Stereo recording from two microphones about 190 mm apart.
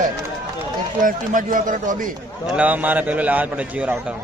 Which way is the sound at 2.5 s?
10° right (ahead or behind).